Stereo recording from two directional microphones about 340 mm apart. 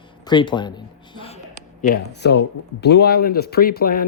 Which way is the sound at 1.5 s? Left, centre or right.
Left.